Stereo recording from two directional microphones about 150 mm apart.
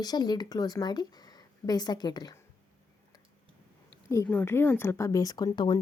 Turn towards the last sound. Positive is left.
turn(degrees=30)  # may be behind; listen again after turning